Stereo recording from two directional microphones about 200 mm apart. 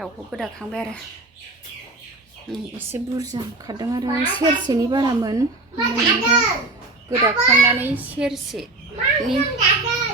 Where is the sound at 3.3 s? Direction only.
20° right (ahead or behind).